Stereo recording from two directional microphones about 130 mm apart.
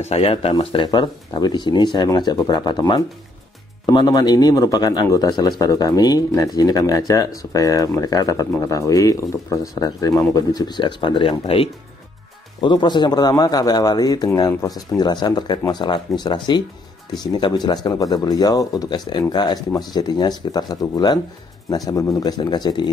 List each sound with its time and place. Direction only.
0.0 s speech: 50° left (ahead or behind)
0.8 s speech: 35° left (ahead or behind)